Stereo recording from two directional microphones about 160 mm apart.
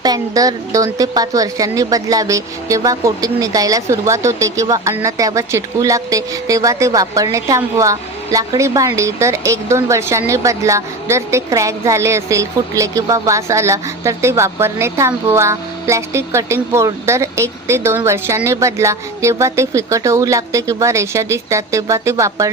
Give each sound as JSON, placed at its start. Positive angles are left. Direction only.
{"t": 0.0, "sound": "speech", "side_deg": -25}